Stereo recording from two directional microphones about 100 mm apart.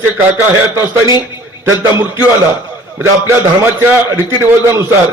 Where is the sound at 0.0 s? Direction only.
20° right (ahead or behind).